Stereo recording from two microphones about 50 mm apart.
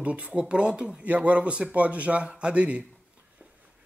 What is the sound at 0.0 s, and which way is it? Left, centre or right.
Speech, right.